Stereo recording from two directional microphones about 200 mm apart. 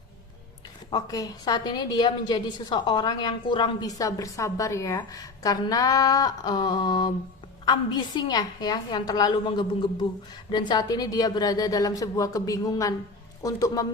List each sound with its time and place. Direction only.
0.9 s a woman's voice: 20° left (ahead or behind)